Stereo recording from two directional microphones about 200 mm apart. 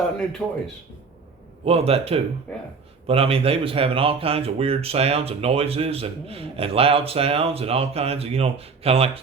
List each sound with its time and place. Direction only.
0.4 s speech: 5° left (ahead or behind)
1.6 s speech: 30° right (ahead or behind)
2.5 s speech: 5° left (ahead or behind)
3.1 s speech: 30° right (ahead or behind)